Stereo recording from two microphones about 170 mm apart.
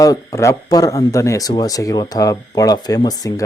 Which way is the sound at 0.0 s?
20° left (ahead or behind).